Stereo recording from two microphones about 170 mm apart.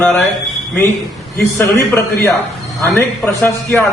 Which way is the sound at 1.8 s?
15° left (ahead or behind).